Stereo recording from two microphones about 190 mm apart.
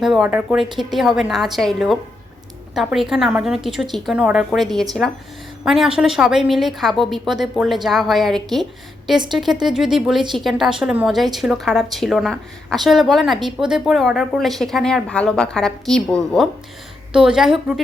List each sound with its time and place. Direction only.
0.0 s speech: 5° right (ahead or behind)
9.1 s speech: 25° right (ahead or behind)
9.4 s speech: centre (ahead or behind)